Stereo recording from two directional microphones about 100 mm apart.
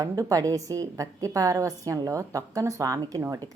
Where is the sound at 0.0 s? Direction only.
35° right (ahead or behind).